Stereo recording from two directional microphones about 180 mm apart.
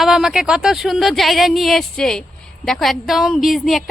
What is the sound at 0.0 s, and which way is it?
A woman's voice, centre (ahead or behind).